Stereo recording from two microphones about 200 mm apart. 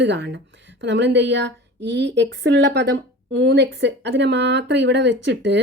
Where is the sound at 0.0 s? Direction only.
60° right (ahead or behind).